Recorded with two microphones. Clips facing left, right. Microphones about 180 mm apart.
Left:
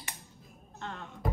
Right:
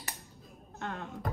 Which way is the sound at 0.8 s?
50° right (ahead or behind).